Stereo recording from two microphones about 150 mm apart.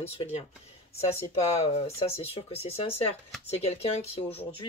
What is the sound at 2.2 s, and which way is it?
Speech, 45° left (ahead or behind).